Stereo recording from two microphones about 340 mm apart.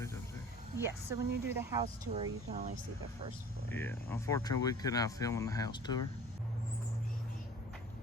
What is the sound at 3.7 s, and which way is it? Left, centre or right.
Speech, centre.